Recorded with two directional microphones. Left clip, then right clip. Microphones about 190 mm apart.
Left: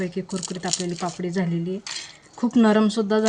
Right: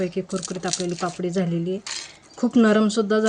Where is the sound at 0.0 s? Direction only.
5° left (ahead or behind).